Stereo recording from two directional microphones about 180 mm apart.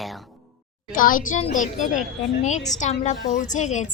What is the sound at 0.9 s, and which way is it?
Speech, 50° left (ahead or behind).